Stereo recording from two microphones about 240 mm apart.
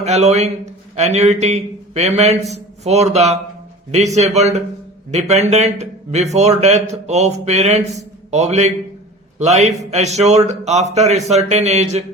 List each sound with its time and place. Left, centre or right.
0.0 s a man's voice: right